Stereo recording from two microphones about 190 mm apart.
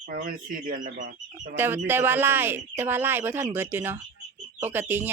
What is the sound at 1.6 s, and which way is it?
Speech, 10° right (ahead or behind).